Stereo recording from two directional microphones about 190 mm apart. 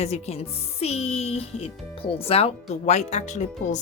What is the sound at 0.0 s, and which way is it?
Speech, 35° left (ahead or behind).